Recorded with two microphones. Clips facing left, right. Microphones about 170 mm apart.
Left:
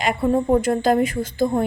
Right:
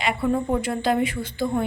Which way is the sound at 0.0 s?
45° left (ahead or behind).